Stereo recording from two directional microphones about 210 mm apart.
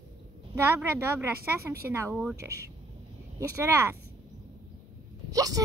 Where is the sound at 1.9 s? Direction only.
15° right (ahead or behind).